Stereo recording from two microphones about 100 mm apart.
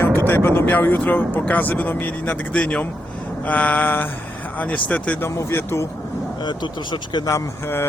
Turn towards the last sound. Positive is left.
turn(degrees=25)  # may be behind; listen again after turning